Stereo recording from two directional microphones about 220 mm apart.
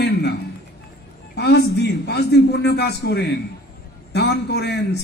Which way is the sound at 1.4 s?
50° left (ahead or behind).